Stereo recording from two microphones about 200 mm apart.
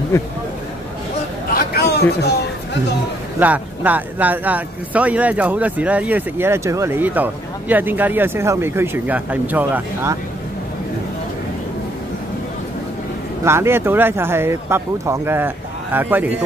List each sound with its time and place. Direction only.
1.5 s a sound: 50° left (ahead or behind)
3.3 s speech: 10° right (ahead or behind)
13.4 s speech: 15° right (ahead or behind)